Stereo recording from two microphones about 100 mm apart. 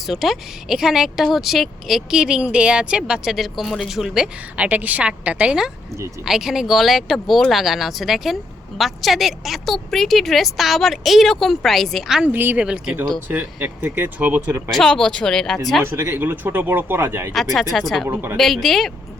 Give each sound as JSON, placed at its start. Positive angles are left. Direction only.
{"t": 0.0, "sound": "speech", "side_deg": 0}
{"t": 12.3, "sound": "speech", "side_deg": -20}
{"t": 12.6, "sound": "speech", "side_deg": -5}
{"t": 13.2, "sound": "speech", "side_deg": -20}
{"t": 14.7, "sound": "speech", "side_deg": 5}
{"t": 15.8, "sound": "speech", "side_deg": -25}
{"t": 17.7, "sound": "speech", "side_deg": 0}
{"t": 18.1, "sound": "speech", "side_deg": -20}
{"t": 18.3, "sound": "speech", "side_deg": 0}